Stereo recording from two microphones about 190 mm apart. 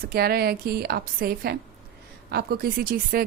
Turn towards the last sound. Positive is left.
turn(degrees=-50)  # may be behind; listen again after turning